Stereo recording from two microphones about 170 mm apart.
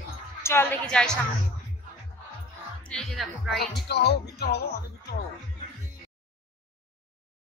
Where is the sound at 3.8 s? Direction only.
75° left (ahead or behind).